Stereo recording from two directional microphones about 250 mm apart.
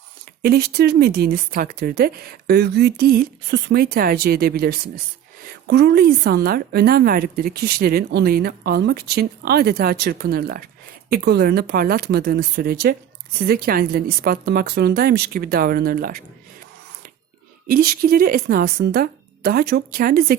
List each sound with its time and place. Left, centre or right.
0.4 s speech: right
17.7 s speech: right